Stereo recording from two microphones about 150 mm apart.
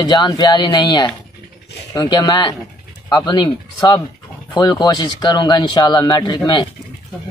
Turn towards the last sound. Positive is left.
turn(degrees=30)  # may be behind; listen again after turning